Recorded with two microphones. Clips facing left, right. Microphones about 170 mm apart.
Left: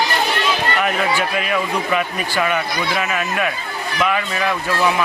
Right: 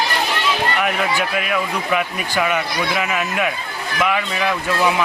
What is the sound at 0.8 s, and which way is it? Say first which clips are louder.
A man's voice: left 1 dB; 5° right (ahead or behind).